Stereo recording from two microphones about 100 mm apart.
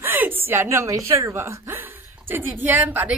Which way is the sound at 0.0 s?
20° right (ahead or behind).